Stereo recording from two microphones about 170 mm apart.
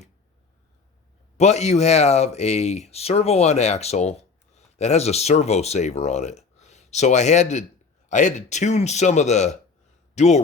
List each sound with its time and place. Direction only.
1.4 s speech: 40° left (ahead or behind)